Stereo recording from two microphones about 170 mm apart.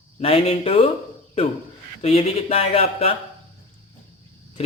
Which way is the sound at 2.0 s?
35° left (ahead or behind).